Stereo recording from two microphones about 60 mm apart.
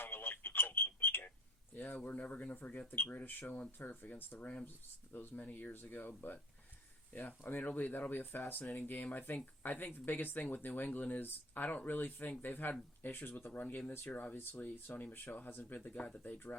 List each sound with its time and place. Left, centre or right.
0.0 s telephone: left
1.7 s speech: left